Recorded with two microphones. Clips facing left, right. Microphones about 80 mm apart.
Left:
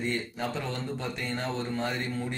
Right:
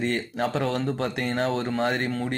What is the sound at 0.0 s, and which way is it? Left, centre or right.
Speech, right.